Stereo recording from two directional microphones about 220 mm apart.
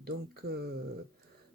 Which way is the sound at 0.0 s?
45° right (ahead or behind).